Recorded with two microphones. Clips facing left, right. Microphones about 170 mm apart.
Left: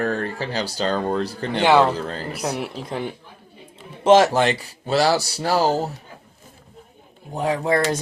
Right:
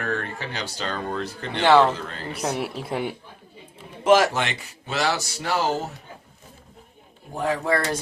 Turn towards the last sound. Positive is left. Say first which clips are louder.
# left 2 dB
turn(degrees=20)  # may be behind; listen again after turning